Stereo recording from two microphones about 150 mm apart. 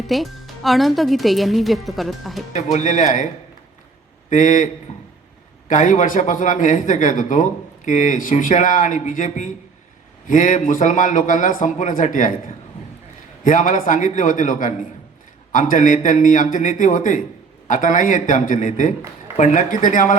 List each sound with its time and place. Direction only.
0.1 s speech: centre (ahead or behind)
2.7 s a man's voice: 55° left (ahead or behind)
4.3 s a man's voice: 55° left (ahead or behind)